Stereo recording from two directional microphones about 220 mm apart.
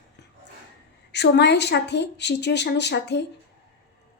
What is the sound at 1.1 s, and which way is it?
A woman's voice, 50° left (ahead or behind).